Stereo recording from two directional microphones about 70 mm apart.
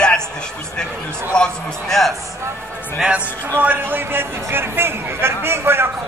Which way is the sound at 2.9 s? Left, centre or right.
Centre.